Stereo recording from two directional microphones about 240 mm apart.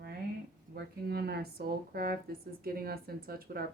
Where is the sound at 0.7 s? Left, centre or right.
Right.